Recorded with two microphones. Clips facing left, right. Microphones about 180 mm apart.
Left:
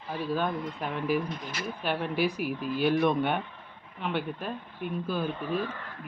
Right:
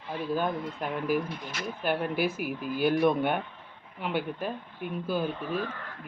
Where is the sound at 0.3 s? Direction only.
Centre (ahead or behind).